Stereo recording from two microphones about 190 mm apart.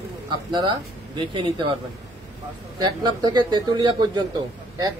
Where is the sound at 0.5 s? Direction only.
25° right (ahead or behind).